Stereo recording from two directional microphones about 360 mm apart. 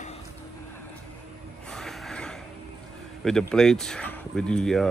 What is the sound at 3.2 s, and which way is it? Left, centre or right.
Speech, centre.